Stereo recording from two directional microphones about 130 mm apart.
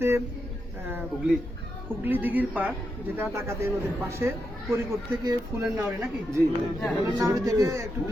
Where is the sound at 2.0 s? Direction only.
15° right (ahead or behind).